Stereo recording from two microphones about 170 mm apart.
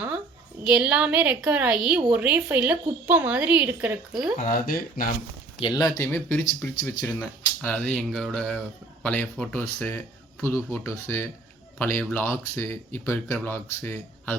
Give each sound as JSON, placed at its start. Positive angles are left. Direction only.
{"t": 0.6, "sound": "a woman's voice", "side_deg": -5}
{"t": 4.4, "sound": "speech", "side_deg": 55}
{"t": 5.5, "sound": "speech", "side_deg": 30}
{"t": 6.0, "sound": "speech", "side_deg": 10}